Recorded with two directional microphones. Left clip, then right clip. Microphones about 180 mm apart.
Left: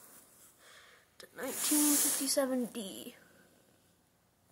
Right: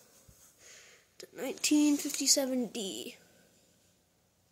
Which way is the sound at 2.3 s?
80° right.